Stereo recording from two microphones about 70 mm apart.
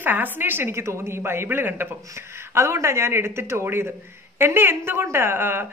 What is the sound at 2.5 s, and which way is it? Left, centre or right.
Speech, right.